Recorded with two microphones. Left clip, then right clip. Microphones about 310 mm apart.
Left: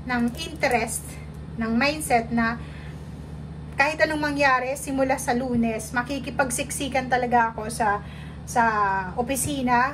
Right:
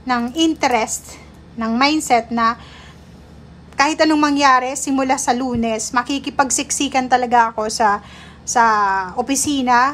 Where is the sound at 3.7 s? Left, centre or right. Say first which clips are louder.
Right 7 dB; centre.